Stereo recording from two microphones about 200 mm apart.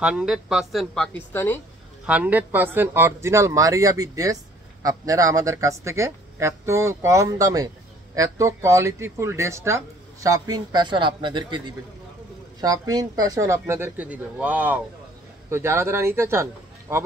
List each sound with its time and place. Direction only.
0.0 s a woman's voice: 5° right (ahead or behind)
2.0 s speech: 5° right (ahead or behind)